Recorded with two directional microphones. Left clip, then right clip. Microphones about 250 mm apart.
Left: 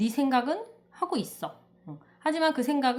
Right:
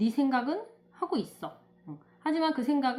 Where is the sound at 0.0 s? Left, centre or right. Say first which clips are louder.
Left 2 dB; left.